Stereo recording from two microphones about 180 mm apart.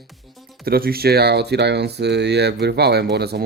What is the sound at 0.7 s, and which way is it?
Speech, 60° right (ahead or behind).